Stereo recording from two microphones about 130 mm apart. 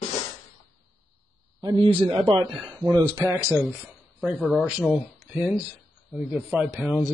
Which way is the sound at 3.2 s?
15° right (ahead or behind).